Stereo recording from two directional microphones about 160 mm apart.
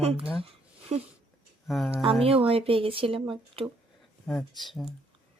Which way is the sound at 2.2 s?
35° right (ahead or behind).